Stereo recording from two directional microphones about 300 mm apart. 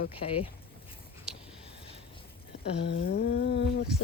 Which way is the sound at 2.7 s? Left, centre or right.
Left.